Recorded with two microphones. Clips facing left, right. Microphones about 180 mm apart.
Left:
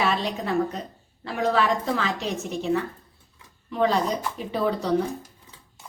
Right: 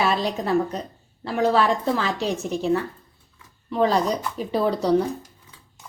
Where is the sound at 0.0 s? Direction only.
35° right (ahead or behind).